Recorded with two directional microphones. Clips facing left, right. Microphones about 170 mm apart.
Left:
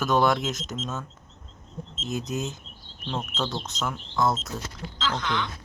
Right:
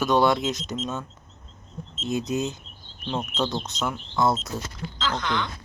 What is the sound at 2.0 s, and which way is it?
Speech, 45° left (ahead or behind).